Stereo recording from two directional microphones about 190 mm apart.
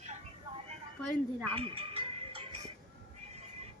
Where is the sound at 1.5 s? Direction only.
30° right (ahead or behind).